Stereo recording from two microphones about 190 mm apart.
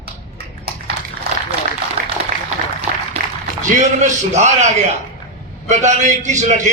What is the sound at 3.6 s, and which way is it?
A man's voice, 40° right (ahead or behind).